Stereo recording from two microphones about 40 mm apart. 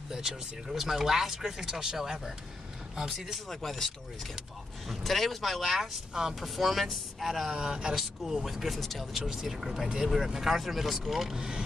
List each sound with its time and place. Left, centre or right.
0.1 s speech: centre
3.4 s speech: centre
5.8 s speech: centre
6.4 s speech: centre
7.4 s speech: centre
7.9 s speech: centre
9.2 s speech: centre
11.3 s speech: centre